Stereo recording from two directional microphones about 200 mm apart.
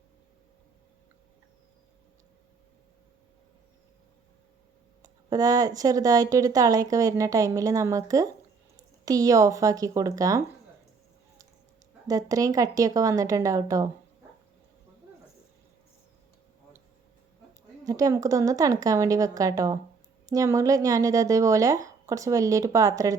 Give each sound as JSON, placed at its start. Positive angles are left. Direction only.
{"t": 5.3, "sound": "a woman's voice", "side_deg": -20}
{"t": 12.0, "sound": "a woman's voice", "side_deg": -15}
{"t": 17.8, "sound": "a woman's voice", "side_deg": -15}